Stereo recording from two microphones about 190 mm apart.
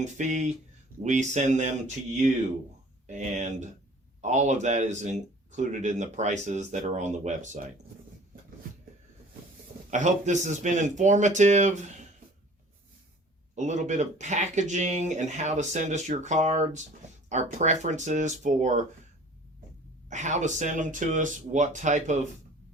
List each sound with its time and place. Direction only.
0.0 s speech: 40° right (ahead or behind)
3.1 s speech: 40° right (ahead or behind)
9.9 s speech: 40° right (ahead or behind)
13.6 s speech: 40° right (ahead or behind)
20.1 s speech: 40° right (ahead or behind)